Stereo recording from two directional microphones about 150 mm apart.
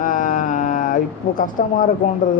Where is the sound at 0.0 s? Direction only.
60° left (ahead or behind).